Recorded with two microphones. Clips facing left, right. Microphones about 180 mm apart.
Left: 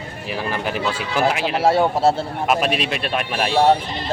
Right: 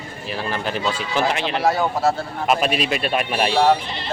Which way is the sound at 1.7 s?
30° left (ahead or behind).